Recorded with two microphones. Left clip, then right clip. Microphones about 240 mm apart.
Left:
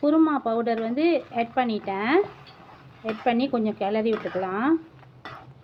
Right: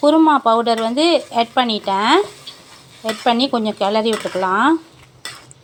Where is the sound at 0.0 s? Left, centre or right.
Right.